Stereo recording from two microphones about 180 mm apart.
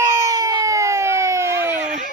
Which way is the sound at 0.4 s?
20° right (ahead or behind).